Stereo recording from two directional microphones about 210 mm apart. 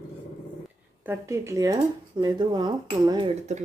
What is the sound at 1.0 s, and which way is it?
Speech, 10° right (ahead or behind).